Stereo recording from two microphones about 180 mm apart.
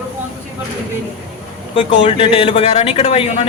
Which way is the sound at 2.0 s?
30° left (ahead or behind).